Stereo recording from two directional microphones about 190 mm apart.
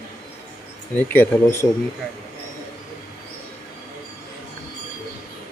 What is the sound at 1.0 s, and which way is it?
Speech, 10° left (ahead or behind).